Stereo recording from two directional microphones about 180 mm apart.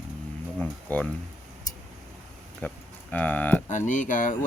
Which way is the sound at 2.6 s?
10° left (ahead or behind).